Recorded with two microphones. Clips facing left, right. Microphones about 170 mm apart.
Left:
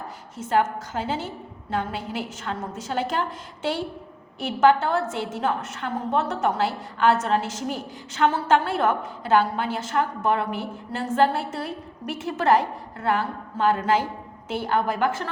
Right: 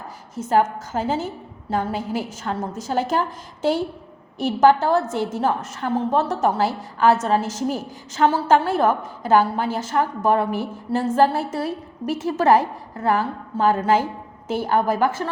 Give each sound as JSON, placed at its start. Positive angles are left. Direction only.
{"t": 0.3, "sound": "a woman's voice", "side_deg": -45}
{"t": 5.5, "sound": "a woman's voice", "side_deg": -30}
{"t": 6.6, "sound": "a woman's voice", "side_deg": -45}